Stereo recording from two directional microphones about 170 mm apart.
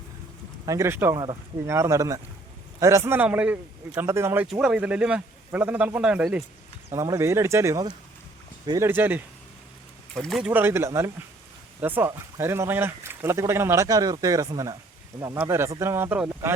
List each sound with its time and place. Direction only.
0.6 s speech: 20° right (ahead or behind)
10.2 s speech: 5° right (ahead or behind)